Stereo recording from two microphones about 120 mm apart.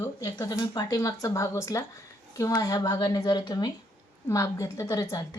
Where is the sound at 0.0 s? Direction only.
30° left (ahead or behind).